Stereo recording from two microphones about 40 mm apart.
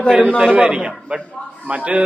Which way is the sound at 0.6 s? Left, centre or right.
Right.